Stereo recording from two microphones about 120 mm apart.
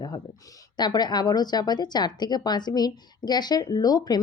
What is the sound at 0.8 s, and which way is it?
A woman's voice, 35° left (ahead or behind).